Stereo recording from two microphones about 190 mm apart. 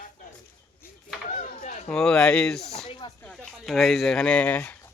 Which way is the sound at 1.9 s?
5° left (ahead or behind).